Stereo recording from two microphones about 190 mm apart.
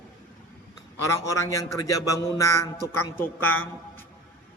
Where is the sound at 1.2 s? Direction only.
15° left (ahead or behind).